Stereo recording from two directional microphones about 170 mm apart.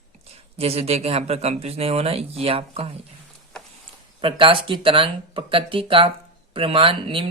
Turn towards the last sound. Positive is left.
turn(degrees=-30)  # may be behind; listen again after turning